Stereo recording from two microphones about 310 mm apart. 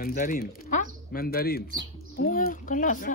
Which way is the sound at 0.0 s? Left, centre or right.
Left.